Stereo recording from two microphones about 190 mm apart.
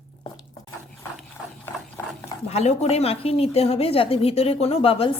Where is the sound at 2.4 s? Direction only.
35° left (ahead or behind).